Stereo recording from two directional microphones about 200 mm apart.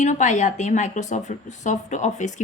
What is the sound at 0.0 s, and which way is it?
Speech, 40° left (ahead or behind).